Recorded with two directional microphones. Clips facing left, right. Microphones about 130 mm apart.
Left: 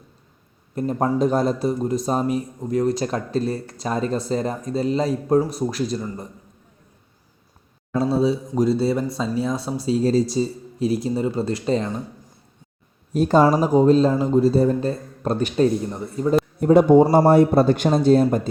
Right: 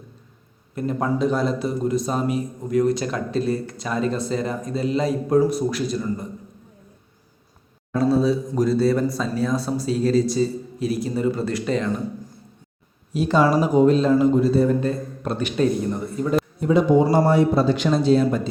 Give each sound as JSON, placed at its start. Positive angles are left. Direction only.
{"t": 0.8, "sound": "speech", "side_deg": 35}
{"t": 8.1, "sound": "speech", "side_deg": 25}
{"t": 13.1, "sound": "speech", "side_deg": 45}
{"t": 16.6, "sound": "speech", "side_deg": 55}